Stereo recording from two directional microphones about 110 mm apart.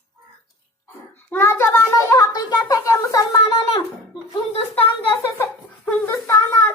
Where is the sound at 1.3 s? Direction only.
25° left (ahead or behind).